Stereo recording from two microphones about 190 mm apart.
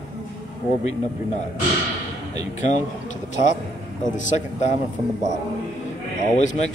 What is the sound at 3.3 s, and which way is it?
Speech, 40° left (ahead or behind).